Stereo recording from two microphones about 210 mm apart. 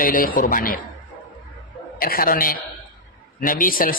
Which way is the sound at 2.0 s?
45° left (ahead or behind).